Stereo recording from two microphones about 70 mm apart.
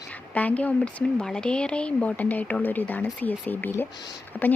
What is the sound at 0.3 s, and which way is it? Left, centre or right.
Speech, left.